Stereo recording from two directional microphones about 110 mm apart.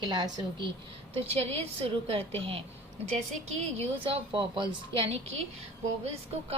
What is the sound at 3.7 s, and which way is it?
Speech, 70° right (ahead or behind).